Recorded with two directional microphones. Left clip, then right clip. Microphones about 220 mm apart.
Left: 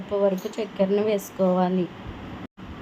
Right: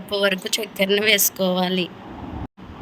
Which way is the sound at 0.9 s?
40° right (ahead or behind).